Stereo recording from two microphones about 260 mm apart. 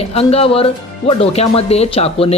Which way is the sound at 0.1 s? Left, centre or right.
Left.